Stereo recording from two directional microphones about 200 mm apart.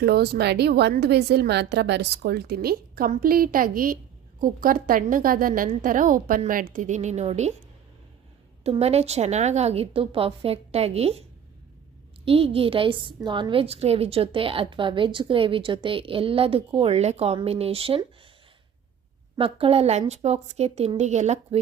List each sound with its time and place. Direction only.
0.0 s a woman's voice: 55° right (ahead or behind); by 7.5 s 35° right (ahead or behind)
8.6 s a woman's voice: 30° right (ahead or behind)
12.2 s a woman's voice: 30° right (ahead or behind)
19.4 s a woman's voice: 25° right (ahead or behind)